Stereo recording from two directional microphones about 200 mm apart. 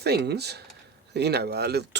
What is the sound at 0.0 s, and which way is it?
Speech, 55° right (ahead or behind).